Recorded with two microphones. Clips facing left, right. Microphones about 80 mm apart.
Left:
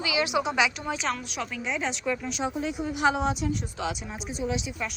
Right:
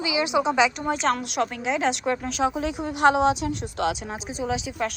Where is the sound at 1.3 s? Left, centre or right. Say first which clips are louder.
Right 6 dB; right.